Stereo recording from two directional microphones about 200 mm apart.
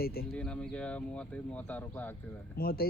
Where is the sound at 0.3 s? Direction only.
5° left (ahead or behind).